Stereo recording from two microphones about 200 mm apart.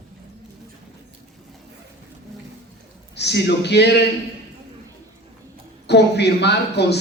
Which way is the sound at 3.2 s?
55° left (ahead or behind).